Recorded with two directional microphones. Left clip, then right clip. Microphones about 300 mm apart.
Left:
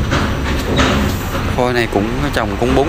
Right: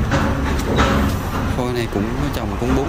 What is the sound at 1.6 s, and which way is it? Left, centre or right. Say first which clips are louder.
Speech: left 9 dB; centre.